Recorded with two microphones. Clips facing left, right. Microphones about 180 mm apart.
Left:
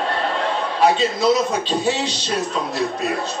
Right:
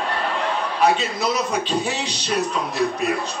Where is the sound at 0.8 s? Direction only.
25° left (ahead or behind).